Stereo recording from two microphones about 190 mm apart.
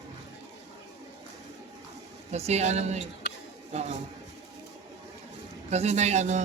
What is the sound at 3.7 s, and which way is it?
Speech, 35° right (ahead or behind).